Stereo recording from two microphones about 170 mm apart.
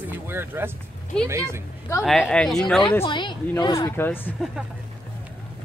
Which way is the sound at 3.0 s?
30° left (ahead or behind).